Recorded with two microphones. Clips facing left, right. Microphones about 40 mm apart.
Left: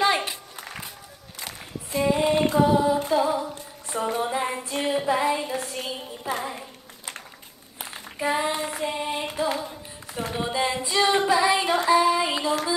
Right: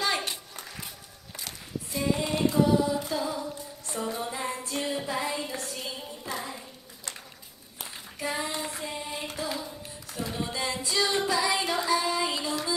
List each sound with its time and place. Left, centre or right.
0.6 s skateboard: left
1.4 s a sound: left
2.5 s mantra: left
3.2 s a sound: left
3.9 s music: left
5.0 s female singing: left
7.8 s female singing: left
9.4 s a sound: left
10.5 s singing: left
11.0 s child singing: left